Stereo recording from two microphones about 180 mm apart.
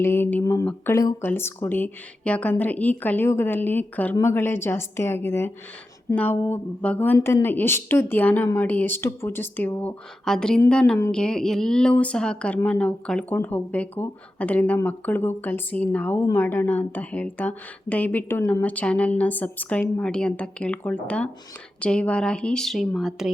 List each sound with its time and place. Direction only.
0.0 s speech: 10° left (ahead or behind)